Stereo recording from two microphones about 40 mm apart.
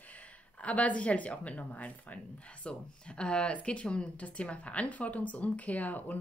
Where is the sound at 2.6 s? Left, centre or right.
Left.